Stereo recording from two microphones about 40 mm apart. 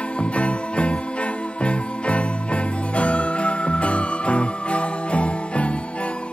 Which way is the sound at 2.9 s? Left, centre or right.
Left.